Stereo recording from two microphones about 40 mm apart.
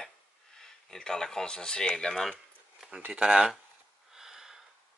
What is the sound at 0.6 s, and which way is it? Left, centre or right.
Speech, centre.